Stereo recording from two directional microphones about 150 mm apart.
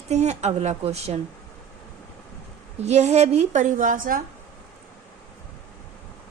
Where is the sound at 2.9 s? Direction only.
50° right (ahead or behind); by 4.2 s 65° right (ahead or behind).